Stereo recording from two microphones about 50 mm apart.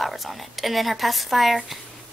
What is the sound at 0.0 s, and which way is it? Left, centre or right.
A woman's voice, centre.